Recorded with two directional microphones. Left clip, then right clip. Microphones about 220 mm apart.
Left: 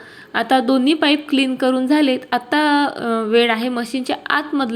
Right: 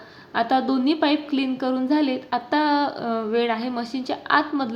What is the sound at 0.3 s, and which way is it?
Speech, 15° left (ahead or behind).